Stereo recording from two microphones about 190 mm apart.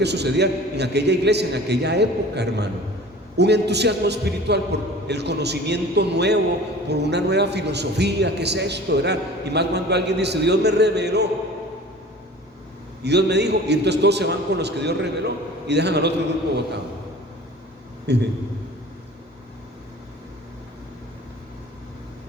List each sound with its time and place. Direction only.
0.0 s a man's voice: 60° right (ahead or behind)
13.0 s a man's voice: 60° right (ahead or behind)
18.0 s a man's voice: 60° right (ahead or behind)